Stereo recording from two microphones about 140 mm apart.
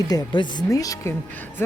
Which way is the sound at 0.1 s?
30° left (ahead or behind).